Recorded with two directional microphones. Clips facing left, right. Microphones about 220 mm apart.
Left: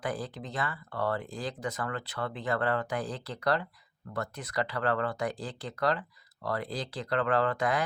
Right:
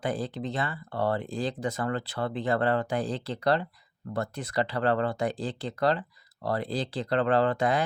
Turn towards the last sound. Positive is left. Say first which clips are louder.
# right 4 dB
turn(degrees=-25)  # may be behind; listen again after turning